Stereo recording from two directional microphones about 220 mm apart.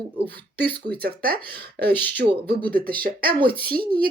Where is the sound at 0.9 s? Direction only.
45° right (ahead or behind).